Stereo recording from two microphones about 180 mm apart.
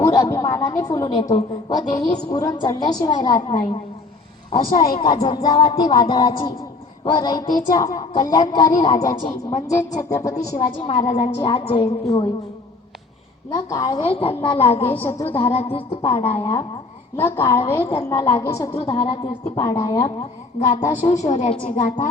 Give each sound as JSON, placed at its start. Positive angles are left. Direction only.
{"t": 0.0, "sound": "a sound", "side_deg": 20}
{"t": 0.8, "sound": "a woman's voice", "side_deg": 20}
{"t": 4.9, "sound": "a woman's voice", "side_deg": 25}
{"t": 10.5, "sound": "a woman's voice", "side_deg": 45}
{"t": 10.8, "sound": "a woman's voice", "side_deg": 35}
{"t": 12.0, "sound": "a woman's voice", "side_deg": 20}
{"t": 13.5, "sound": "a woman's voice", "side_deg": 20}
{"t": 17.2, "sound": "a woman's voice", "side_deg": 15}
{"t": 18.7, "sound": "a woman's voice", "side_deg": 30}
{"t": 19.5, "sound": "a woman's voice", "side_deg": 15}
{"t": 21.1, "sound": "a woman's voice", "side_deg": 40}